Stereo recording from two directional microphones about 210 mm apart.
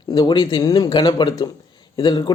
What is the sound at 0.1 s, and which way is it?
Speech, 20° left (ahead or behind).